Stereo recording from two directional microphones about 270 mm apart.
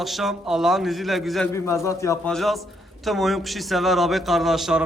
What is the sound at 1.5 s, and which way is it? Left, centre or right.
A man's voice, centre.